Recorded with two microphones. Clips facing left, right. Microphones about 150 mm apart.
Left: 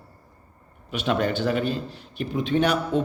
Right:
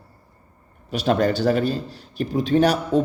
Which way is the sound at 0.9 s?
40° right (ahead or behind).